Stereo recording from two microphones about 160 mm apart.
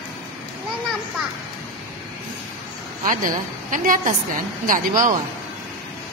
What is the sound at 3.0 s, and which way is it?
A woman's voice, 55° right (ahead or behind).